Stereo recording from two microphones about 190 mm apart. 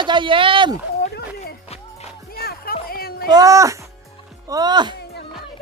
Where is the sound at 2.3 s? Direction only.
50° left (ahead or behind).